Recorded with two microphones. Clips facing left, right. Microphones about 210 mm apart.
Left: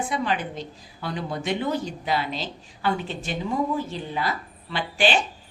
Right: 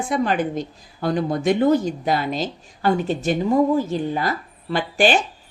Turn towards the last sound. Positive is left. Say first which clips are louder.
# right 5 dB
turn(degrees=-45)  # may be behind; listen again after turning